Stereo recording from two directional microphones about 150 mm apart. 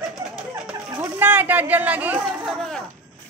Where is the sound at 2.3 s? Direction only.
5° left (ahead or behind).